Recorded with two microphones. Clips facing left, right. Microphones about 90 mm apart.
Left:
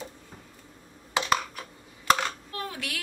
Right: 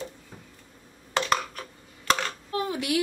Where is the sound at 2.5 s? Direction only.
15° right (ahead or behind).